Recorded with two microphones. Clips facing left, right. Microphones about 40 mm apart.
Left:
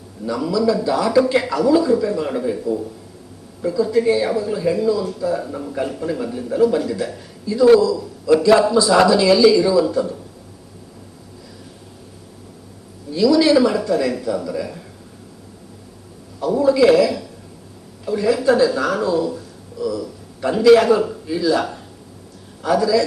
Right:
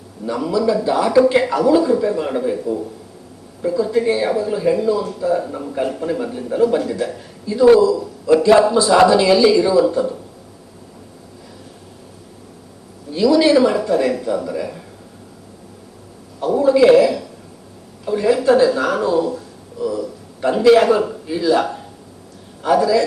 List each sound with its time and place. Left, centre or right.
0.3 s speech: right
3.8 s speech: centre
7.4 s a man's voice: right
13.1 s a man's voice: right
16.6 s a woman's voice: right
20.7 s speech: centre
21.2 s speech: right
22.6 s speech: right